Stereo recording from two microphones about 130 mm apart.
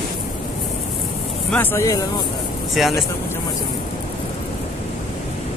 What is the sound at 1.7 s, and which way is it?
Speech, 25° left (ahead or behind).